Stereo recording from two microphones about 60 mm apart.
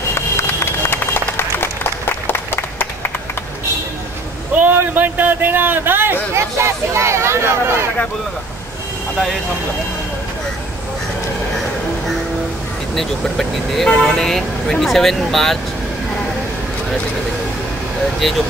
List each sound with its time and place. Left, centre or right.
0.1 s run: left
4.6 s a man's voice: right
6.3 s speech: right
9.1 s speech: centre
12.9 s speech: centre
18.2 s speech: centre